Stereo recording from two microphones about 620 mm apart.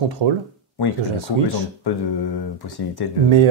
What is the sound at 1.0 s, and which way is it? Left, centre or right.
Speech, right.